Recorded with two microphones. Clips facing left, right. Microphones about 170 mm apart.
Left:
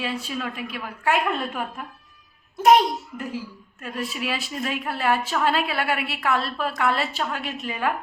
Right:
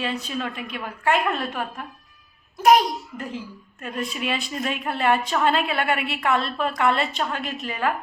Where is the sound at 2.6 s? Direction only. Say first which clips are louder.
Even; 25° left (ahead or behind).